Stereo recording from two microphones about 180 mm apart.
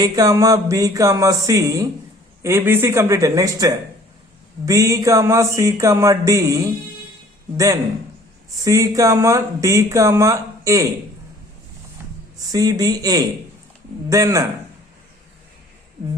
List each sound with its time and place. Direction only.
0.0 s speech: 20° right (ahead or behind)
12.5 s speech: 20° right (ahead or behind)